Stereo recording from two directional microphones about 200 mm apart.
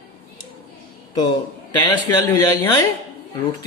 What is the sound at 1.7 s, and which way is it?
Speech, 15° left (ahead or behind).